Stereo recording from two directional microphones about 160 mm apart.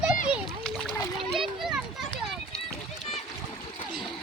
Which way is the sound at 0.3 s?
5° right (ahead or behind).